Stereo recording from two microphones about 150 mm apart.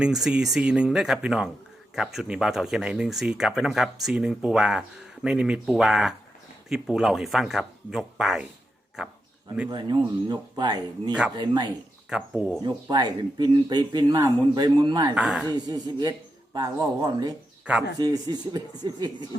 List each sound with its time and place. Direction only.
0.0 s speech: 5° right (ahead or behind)
9.6 s speech: 30° right (ahead or behind)
12.0 s speech: 5° right (ahead or behind)
12.6 s speech: 30° right (ahead or behind)
15.1 s speech: 5° right (ahead or behind)
15.4 s speech: 25° right (ahead or behind)